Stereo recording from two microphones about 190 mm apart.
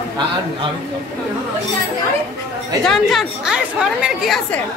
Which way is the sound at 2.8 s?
Centre (ahead or behind).